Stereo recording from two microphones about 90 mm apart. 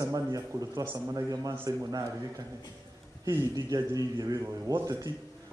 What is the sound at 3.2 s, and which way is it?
A man's voice, 40° right (ahead or behind).